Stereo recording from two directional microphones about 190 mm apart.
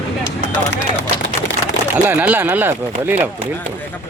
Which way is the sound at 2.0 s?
10° right (ahead or behind).